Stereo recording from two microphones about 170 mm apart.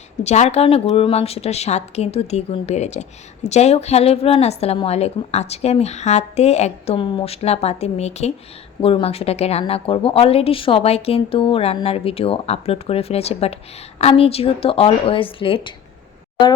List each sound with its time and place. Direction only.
0.2 s a woman's voice: 40° left (ahead or behind)